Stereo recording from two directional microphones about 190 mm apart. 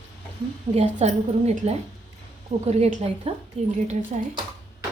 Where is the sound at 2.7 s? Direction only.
35° right (ahead or behind).